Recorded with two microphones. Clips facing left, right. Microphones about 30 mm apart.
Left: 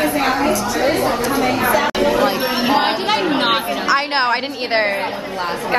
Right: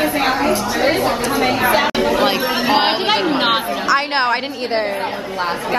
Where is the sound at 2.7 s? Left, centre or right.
Right.